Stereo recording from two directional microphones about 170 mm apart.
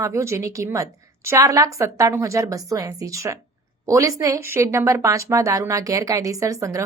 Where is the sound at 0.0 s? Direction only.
15° right (ahead or behind).